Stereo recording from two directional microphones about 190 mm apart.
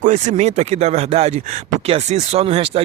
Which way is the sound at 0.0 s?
40° right (ahead or behind).